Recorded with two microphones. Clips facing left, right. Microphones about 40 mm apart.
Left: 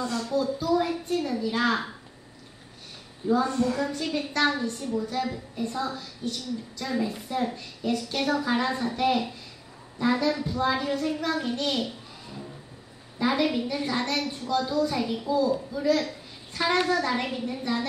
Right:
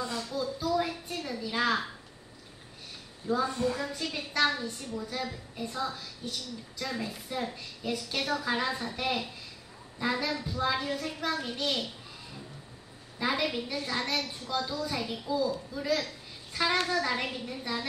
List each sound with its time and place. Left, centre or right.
0.0 s a sound: centre
0.3 s a sound: centre
3.4 s a woman's voice: centre
4.0 s a woman's voice: centre
7.5 s a woman's voice: centre
13.2 s a woman's voice: centre